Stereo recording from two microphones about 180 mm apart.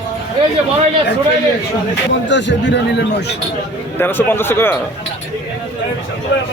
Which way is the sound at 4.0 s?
10° left (ahead or behind).